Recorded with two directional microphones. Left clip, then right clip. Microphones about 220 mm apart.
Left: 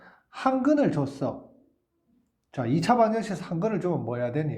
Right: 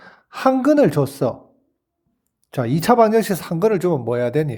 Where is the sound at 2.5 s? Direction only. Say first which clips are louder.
Right 7 dB; 45° right (ahead or behind).